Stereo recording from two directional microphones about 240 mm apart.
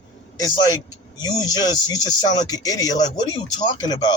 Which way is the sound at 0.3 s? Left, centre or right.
Centre.